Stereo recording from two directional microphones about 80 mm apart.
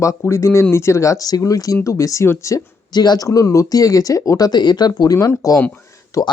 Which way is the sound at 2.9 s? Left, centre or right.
Left.